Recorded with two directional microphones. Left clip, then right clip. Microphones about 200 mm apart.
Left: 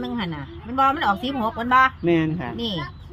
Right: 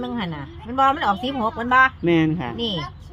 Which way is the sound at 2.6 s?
Centre (ahead or behind).